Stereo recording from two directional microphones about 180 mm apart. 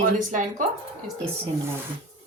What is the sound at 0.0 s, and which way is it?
Speech, 45° right (ahead or behind).